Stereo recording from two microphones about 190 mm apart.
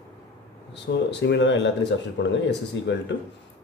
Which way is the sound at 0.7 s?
65° left (ahead or behind).